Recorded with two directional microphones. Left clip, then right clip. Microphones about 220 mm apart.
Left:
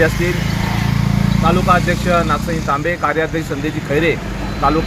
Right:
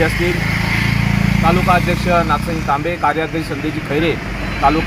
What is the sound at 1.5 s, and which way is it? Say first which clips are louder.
Speech: even; 10° left (ahead or behind).